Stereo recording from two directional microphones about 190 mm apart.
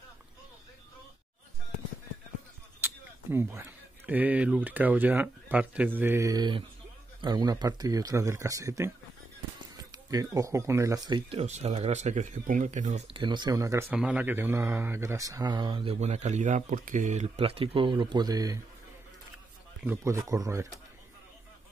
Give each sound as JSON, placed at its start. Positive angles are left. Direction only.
{"t": 2.8, "sound": "speech", "side_deg": -10}
{"t": 10.1, "sound": "speech", "side_deg": -15}
{"t": 13.1, "sound": "speech", "side_deg": -25}
{"t": 19.8, "sound": "speech", "side_deg": -10}